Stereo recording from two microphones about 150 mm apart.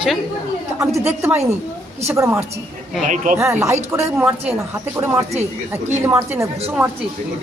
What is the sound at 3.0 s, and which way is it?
Speech, 55° right (ahead or behind).